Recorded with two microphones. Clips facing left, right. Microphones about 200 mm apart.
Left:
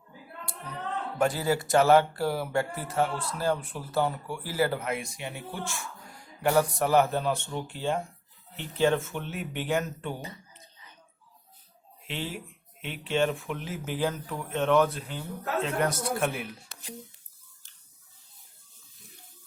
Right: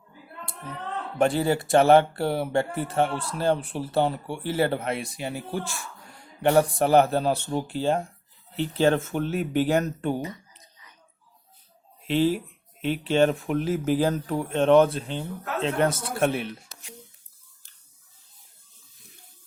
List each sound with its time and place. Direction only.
1.2 s speech: 25° right (ahead or behind)
10.2 s speech: 30° left (ahead or behind)
12.0 s speech: 35° right (ahead or behind)